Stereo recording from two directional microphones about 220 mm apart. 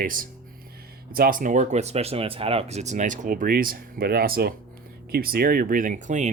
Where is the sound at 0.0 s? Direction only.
40° right (ahead or behind).